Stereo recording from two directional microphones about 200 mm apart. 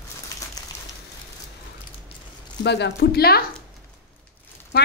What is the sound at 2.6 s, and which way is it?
Speech, 60° left (ahead or behind).